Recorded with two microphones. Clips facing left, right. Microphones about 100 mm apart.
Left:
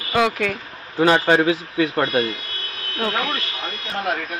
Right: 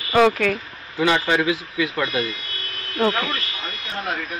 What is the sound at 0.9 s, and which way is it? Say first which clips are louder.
A man's voice: left 4 dB; 40° left (ahead or behind).